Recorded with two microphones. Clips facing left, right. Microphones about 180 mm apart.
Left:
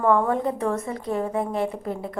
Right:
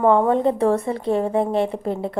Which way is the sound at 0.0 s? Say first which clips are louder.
Right 5 dB; 20° right (ahead or behind).